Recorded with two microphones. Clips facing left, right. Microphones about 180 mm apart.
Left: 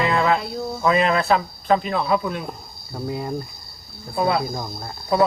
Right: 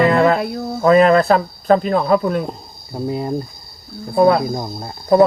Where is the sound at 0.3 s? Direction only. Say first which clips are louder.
Right 5 dB; 65° right (ahead or behind).